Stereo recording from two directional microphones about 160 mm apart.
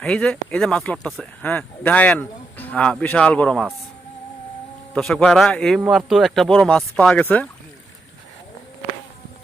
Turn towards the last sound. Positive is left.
turn(degrees=10)  # may be behind; listen again after turning